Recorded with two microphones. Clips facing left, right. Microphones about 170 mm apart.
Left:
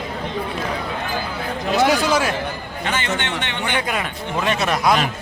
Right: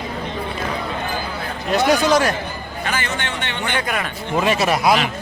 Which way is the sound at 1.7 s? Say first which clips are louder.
Right 2 dB; 5° left (ahead or behind).